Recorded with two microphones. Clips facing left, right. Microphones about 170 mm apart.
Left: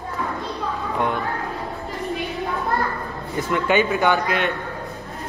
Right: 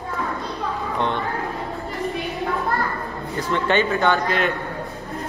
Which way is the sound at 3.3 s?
10° left (ahead or behind).